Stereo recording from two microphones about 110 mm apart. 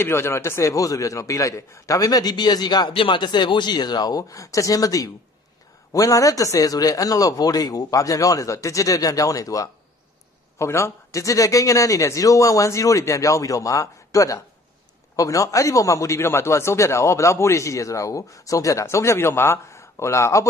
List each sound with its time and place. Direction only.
0.0 s a man's voice: 25° left (ahead or behind); by 2.9 s 40° left (ahead or behind)
2.9 s a man's voice: 50° left (ahead or behind); by 20.4 s 25° left (ahead or behind)